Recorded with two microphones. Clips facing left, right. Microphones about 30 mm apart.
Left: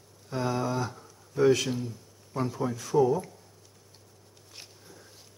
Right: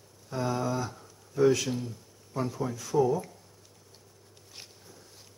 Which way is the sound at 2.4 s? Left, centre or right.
Centre.